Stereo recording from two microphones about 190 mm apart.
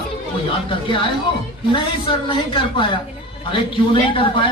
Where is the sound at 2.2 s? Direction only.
25° left (ahead or behind).